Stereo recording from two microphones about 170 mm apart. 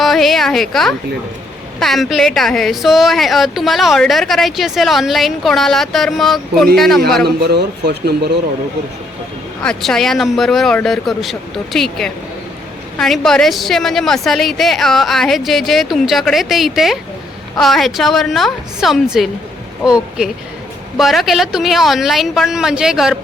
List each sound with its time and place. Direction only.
0.0 s a sound: centre (ahead or behind)
1.8 s a woman's voice: centre (ahead or behind)
7.4 s speech: 70° right (ahead or behind)
9.6 s a woman's voice: centre (ahead or behind)